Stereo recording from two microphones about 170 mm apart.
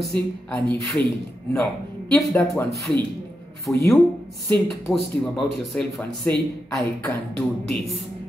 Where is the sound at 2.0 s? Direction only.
15° left (ahead or behind).